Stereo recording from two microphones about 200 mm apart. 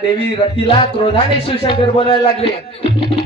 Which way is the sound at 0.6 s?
30° left (ahead or behind).